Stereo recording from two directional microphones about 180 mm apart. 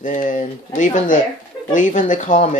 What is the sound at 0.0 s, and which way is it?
Speech, 45° left (ahead or behind).